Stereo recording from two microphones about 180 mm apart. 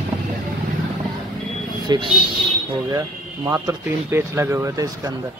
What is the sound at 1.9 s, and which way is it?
Speech, 20° right (ahead or behind).